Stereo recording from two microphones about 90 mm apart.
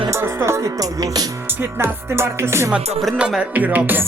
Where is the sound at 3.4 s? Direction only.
20° right (ahead or behind).